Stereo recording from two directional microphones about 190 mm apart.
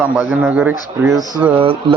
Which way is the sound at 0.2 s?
10° right (ahead or behind).